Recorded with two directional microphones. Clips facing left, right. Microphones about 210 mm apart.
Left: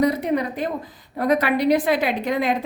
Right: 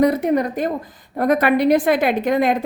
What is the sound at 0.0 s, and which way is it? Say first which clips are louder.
A woman's voice: right 4 dB; 50° right (ahead or behind).